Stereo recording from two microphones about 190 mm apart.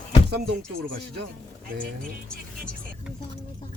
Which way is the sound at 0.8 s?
60° right (ahead or behind).